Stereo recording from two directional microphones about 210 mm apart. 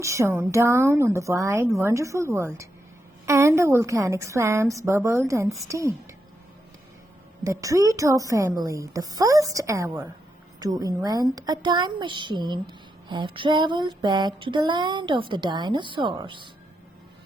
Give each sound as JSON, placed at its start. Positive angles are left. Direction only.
{"t": 0.0, "sound": "a woman's voice", "side_deg": -15}
{"t": 7.4, "sound": "a woman's voice", "side_deg": -15}
{"t": 10.6, "sound": "a sound", "side_deg": -20}